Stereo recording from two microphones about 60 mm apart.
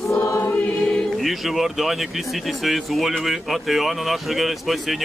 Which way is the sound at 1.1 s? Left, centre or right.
Centre.